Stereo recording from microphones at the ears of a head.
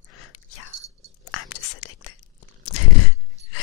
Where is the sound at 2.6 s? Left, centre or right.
Left.